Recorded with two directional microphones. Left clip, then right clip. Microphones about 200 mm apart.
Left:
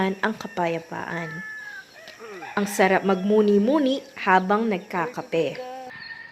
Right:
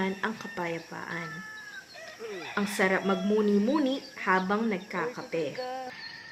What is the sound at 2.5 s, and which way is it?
Speech, 35° left (ahead or behind).